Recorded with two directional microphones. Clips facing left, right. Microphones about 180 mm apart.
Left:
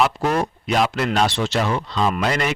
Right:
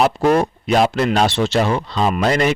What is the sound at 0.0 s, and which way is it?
Speech, 40° right (ahead or behind).